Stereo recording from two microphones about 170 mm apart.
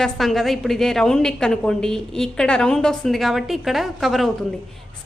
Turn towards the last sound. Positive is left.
turn(degrees=0)  # may be behind; listen again after turning